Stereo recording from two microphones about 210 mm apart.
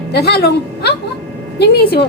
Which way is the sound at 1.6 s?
50° left (ahead or behind).